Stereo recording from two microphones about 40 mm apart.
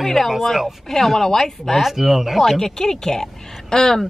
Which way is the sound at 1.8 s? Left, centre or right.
Centre.